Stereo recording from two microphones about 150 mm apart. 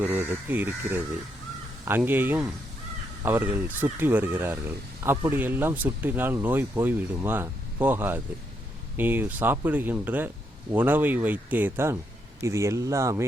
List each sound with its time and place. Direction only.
0.0 s speech: 15° right (ahead or behind)